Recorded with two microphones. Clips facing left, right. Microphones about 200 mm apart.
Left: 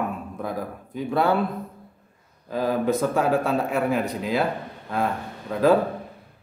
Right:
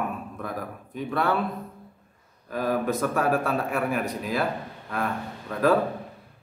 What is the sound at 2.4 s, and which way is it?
A man's voice, 25° left (ahead or behind).